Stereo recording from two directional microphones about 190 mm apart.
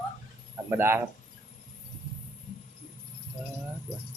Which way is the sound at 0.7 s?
10° right (ahead or behind).